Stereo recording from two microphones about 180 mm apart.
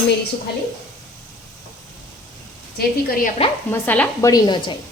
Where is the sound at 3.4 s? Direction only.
35° left (ahead or behind).